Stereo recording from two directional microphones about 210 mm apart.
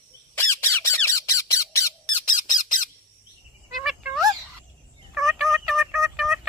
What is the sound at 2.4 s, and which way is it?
Squawk, 40° left (ahead or behind).